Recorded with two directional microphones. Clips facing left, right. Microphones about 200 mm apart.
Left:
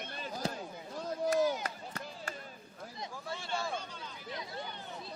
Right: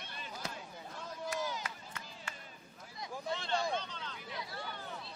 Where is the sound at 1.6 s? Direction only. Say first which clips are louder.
Left 5 dB; 40° left (ahead or behind).